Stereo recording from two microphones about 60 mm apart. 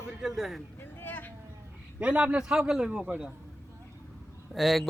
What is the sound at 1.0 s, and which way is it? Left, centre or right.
Vehicle, left.